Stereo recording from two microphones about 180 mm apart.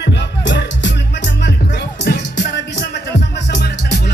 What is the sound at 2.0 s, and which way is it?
Music, 70° left (ahead or behind).